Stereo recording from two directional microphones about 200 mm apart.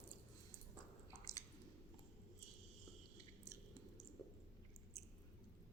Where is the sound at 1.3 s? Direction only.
15° left (ahead or behind).